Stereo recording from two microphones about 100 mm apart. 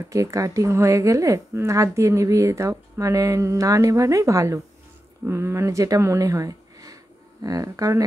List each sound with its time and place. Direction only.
0.0 s a woman's voice: 30° right (ahead or behind)